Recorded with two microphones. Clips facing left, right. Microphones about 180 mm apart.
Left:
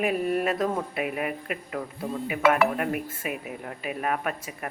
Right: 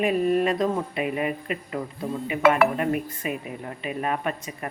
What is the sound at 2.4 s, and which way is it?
Speech, 55° right (ahead or behind).